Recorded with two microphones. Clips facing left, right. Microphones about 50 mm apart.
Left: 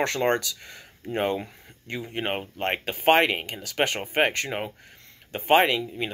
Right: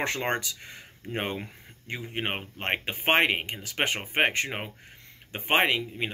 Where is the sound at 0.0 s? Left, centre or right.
Right.